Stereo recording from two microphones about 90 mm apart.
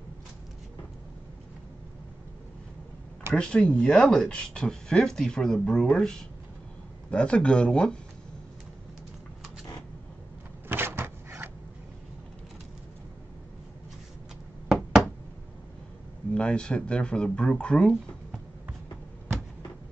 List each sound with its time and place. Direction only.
3.3 s speech: 10° left (ahead or behind)
10.7 s cupboard open or close: 25° right (ahead or behind)
16.3 s speech: 10° left (ahead or behind)